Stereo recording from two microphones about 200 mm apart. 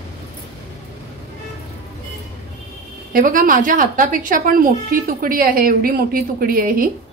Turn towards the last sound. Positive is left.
turn(degrees=-45)  # may be behind; listen again after turning